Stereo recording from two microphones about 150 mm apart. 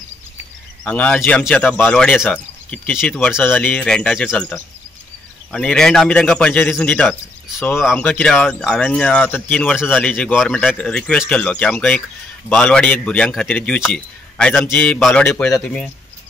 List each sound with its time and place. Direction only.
0.8 s speech: 10° left (ahead or behind)